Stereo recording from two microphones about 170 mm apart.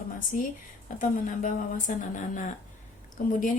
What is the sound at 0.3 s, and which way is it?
A woman's voice, 50° left (ahead or behind).